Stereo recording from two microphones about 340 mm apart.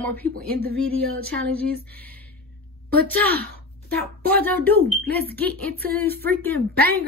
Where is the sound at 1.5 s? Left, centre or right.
Centre.